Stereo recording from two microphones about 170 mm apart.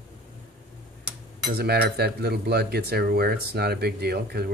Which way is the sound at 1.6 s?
70° right (ahead or behind).